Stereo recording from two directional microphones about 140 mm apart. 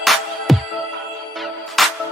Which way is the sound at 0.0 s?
Centre (ahead or behind).